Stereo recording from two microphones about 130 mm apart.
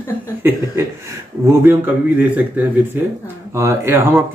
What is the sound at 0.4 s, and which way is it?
Speech, 15° right (ahead or behind).